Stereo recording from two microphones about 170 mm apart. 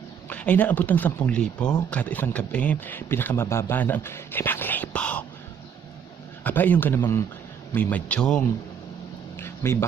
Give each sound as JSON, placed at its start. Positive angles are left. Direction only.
{"t": 0.3, "sound": "speech", "side_deg": 10}
{"t": 6.4, "sound": "speech", "side_deg": 10}
{"t": 9.6, "sound": "speech", "side_deg": 15}